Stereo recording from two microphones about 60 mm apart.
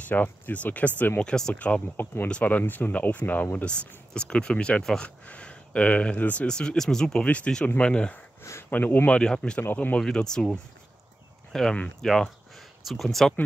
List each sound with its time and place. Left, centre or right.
0.1 s speech: left
1.2 s speech: centre
1.5 s speech: left
9.6 s speech: left
9.9 s speech: centre